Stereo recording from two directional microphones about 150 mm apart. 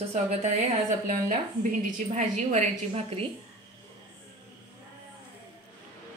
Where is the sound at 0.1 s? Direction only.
45° right (ahead or behind).